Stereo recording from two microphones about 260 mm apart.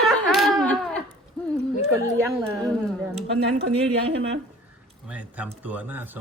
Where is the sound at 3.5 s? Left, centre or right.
Right.